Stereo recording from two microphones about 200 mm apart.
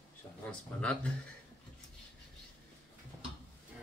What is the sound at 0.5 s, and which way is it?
Speech, 5° left (ahead or behind).